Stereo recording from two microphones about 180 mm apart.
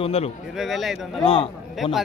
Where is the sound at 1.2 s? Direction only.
30° left (ahead or behind).